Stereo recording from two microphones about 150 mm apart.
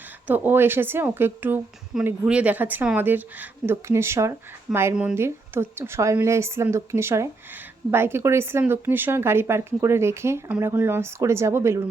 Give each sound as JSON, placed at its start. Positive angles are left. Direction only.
{"t": 0.3, "sound": "a woman's voice", "side_deg": -15}